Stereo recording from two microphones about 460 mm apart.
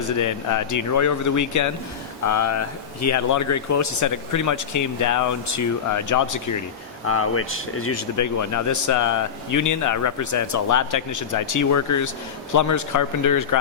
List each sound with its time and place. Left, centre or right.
0.2 s speech: left
7.1 s speech: left